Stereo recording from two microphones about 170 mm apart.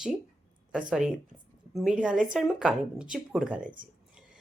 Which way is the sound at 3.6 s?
50° right (ahead or behind).